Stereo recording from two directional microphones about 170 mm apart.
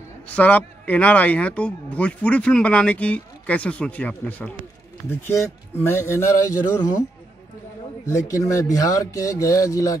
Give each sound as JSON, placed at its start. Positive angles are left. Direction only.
{"t": 0.3, "sound": "speech", "side_deg": 10}
{"t": 8.1, "sound": "speech", "side_deg": 20}